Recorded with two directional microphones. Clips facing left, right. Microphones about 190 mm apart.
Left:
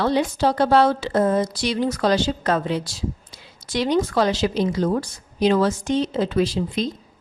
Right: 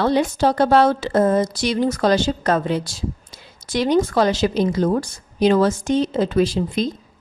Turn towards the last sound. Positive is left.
turn(degrees=-50)  # may be behind; listen again after turning